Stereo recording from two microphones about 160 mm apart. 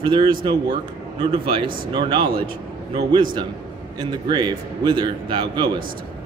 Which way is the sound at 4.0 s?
25° right (ahead or behind).